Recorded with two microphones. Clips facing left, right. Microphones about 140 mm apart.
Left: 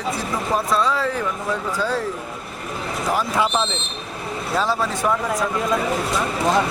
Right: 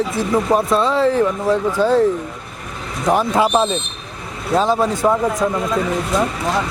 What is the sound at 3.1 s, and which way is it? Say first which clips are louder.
Speech: right 6 dB; 20° right (ahead or behind).